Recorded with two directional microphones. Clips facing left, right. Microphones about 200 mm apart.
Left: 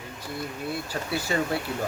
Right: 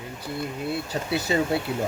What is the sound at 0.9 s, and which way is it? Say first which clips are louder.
Speech: right 3 dB; 25° right (ahead or behind).